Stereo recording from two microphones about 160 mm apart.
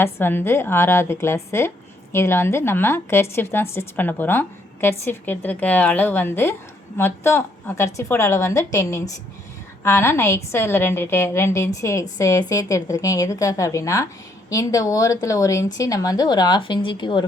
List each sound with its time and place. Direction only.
0.0 s a woman's voice: 15° left (ahead or behind); by 17.2 s 30° left (ahead or behind)